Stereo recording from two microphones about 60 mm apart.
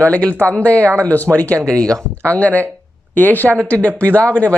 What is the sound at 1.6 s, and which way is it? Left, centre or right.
Speech, centre.